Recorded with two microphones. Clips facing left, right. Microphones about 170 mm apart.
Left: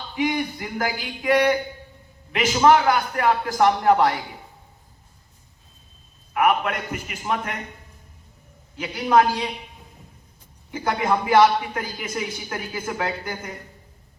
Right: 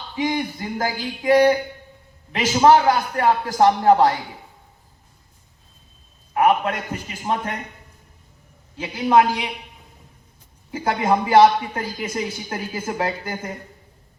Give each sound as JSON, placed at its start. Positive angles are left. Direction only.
{"t": 0.2, "sound": "a man's voice", "side_deg": -30}
{"t": 6.3, "sound": "a man's voice", "side_deg": -30}
{"t": 8.8, "sound": "speech", "side_deg": -25}
{"t": 10.7, "sound": "speech", "side_deg": -30}